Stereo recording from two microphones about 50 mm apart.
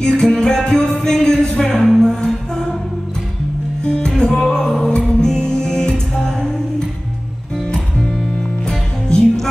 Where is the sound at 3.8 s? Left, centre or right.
Centre.